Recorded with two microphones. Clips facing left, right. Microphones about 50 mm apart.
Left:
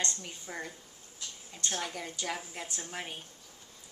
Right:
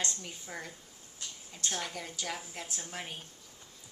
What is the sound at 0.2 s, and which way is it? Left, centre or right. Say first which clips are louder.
Speech: left 2 dB; centre.